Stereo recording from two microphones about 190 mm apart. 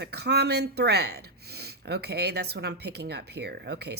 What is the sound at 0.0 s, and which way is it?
Speech, 60° right (ahead or behind).